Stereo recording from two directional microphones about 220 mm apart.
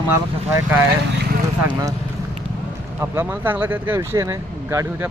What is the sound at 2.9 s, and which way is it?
Speech, 10° right (ahead or behind).